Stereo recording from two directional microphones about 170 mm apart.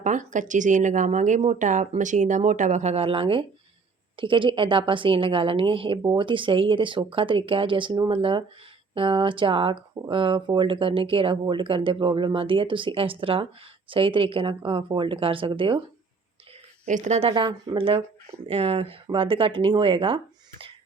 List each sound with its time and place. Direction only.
0.0 s a woman's voice: 45° right (ahead or behind); by 15.8 s 30° right (ahead or behind)
16.8 s a woman's voice: 45° right (ahead or behind)